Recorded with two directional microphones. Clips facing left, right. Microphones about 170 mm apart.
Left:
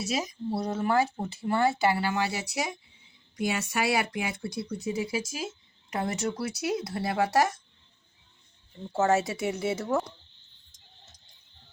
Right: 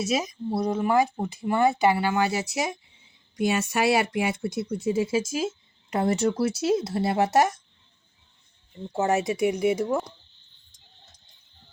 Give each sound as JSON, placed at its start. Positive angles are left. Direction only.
{"t": 0.0, "sound": "speech", "side_deg": -20}
{"t": 8.9, "sound": "speech", "side_deg": -15}